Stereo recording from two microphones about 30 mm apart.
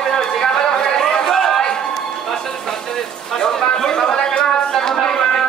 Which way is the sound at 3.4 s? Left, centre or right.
Centre.